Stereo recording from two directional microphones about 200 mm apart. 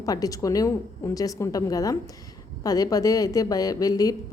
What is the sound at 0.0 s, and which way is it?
A woman's voice, 15° left (ahead or behind).